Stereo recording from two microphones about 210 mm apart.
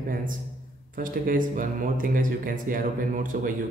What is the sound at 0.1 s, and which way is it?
Speech, 40° right (ahead or behind).